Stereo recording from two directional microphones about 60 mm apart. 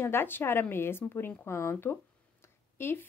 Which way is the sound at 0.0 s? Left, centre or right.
Left.